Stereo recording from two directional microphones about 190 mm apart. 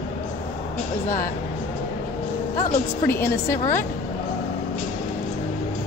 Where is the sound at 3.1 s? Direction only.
15° left (ahead or behind).